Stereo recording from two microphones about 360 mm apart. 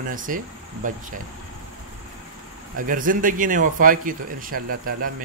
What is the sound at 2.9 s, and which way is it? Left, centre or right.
Speech, right.